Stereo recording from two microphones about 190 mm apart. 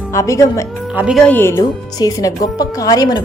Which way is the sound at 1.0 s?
Centre (ahead or behind).